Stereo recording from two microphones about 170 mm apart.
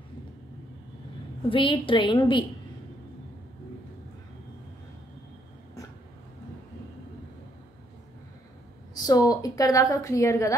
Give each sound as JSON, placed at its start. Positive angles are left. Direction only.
{"t": 1.5, "sound": "a woman's voice", "side_deg": 30}
{"t": 8.9, "sound": "a woman's voice", "side_deg": 20}